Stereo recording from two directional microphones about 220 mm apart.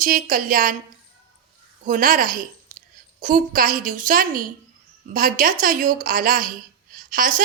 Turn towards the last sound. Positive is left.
turn(degrees=-40)  # may be behind; listen again after turning